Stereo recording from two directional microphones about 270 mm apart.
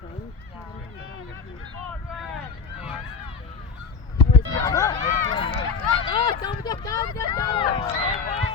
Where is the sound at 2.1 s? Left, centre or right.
Centre.